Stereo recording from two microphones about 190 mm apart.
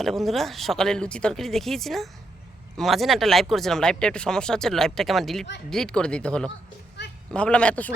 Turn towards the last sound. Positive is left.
turn(degrees=5)  # may be behind; listen again after turning